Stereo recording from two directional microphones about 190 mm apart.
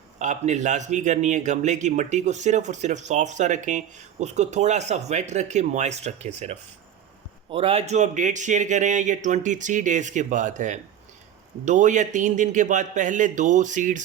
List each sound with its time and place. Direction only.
0.2 s a man's voice: 40° right (ahead or behind)